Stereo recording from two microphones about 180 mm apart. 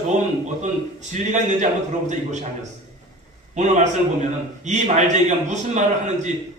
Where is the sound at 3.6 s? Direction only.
40° right (ahead or behind).